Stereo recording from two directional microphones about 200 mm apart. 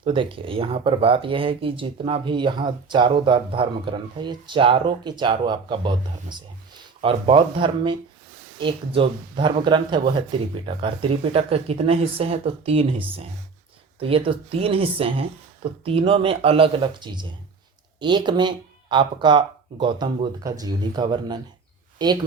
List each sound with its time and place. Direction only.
0.0 s a woman's voice: 25° right (ahead or behind)